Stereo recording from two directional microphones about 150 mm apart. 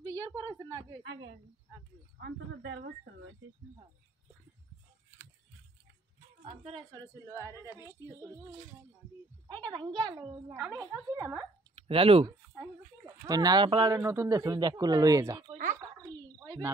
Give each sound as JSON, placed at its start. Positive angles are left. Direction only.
{"t": 0.1, "sound": "a woman's voice", "side_deg": -20}
{"t": 6.7, "sound": "speech", "side_deg": -25}
{"t": 9.7, "sound": "speech", "side_deg": -30}
{"t": 10.5, "sound": "a woman's voice", "side_deg": -15}
{"t": 11.7, "sound": "speech", "side_deg": -40}
{"t": 13.0, "sound": "speech", "side_deg": -20}
{"t": 15.5, "sound": "speech", "side_deg": -60}
{"t": 16.4, "sound": "speech", "side_deg": -20}